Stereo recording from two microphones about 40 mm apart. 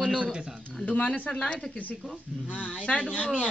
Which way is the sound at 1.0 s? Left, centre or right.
Left.